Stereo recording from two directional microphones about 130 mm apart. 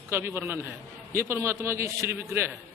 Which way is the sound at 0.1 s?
20° right (ahead or behind).